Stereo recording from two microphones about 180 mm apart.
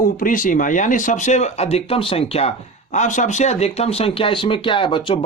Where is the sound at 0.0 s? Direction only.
50° left (ahead or behind).